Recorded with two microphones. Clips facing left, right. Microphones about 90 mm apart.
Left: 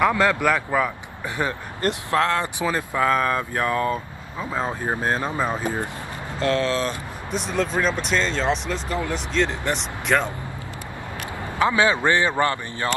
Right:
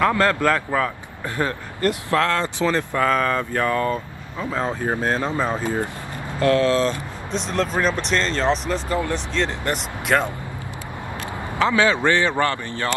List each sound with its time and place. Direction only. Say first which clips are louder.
0.0 s speech: right 1 dB; 15° left (ahead or behind)
7.3 s speech: right 1 dB; 5° left (ahead or behind)
11.5 s speech: right 1 dB; 20° left (ahead or behind)